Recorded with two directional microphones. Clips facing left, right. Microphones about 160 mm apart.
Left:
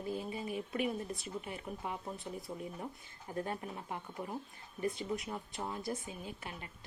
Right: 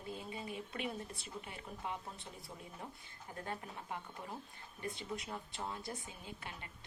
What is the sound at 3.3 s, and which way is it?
A woman's voice, 20° left (ahead or behind).